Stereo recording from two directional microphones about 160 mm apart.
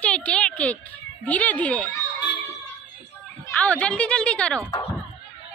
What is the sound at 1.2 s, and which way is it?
Speech, 10° left (ahead or behind).